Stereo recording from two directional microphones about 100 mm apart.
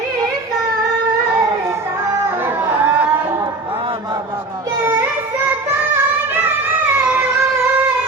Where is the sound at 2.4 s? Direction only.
20° right (ahead or behind).